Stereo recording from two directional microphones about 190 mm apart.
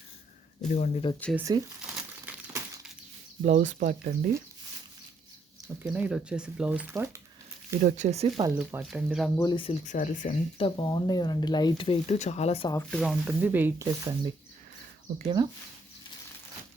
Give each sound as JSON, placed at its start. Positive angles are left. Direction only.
{"t": 0.7, "sound": "speech", "side_deg": 40}
{"t": 1.4, "sound": "speech", "side_deg": -15}
{"t": 1.9, "sound": "crumpling", "side_deg": -10}
{"t": 3.4, "sound": "speech", "side_deg": -40}
{"t": 5.8, "sound": "speech", "side_deg": -5}
{"t": 7.8, "sound": "speech", "side_deg": -40}
{"t": 8.5, "sound": "speech", "side_deg": -5}
{"t": 9.4, "sound": "speech", "side_deg": 25}
{"t": 9.8, "sound": "speech", "side_deg": 45}
{"t": 10.6, "sound": "speech", "side_deg": 25}
{"t": 12.9, "sound": "speech", "side_deg": 0}
{"t": 15.2, "sound": "speech", "side_deg": -25}